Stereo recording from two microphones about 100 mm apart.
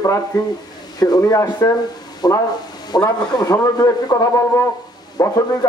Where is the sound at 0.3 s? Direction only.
40° left (ahead or behind).